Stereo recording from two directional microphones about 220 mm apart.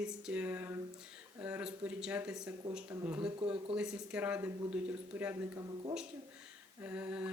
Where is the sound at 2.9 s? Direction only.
10° right (ahead or behind).